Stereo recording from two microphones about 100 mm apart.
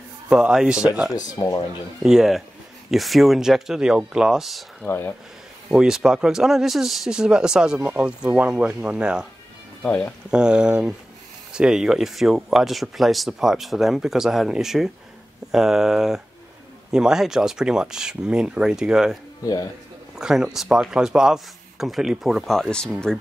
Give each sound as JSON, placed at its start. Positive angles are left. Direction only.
{"t": 0.3, "sound": "speech", "side_deg": -5}
{"t": 1.4, "sound": "speech", "side_deg": 45}
{"t": 2.0, "sound": "speech", "side_deg": -5}
{"t": 4.8, "sound": "speech", "side_deg": 20}
{"t": 5.7, "sound": "speech", "side_deg": -5}
{"t": 9.8, "sound": "speech", "side_deg": 15}
{"t": 10.3, "sound": "speech", "side_deg": -10}
{"t": 19.4, "sound": "speech", "side_deg": 40}
{"t": 20.2, "sound": "speech", "side_deg": -5}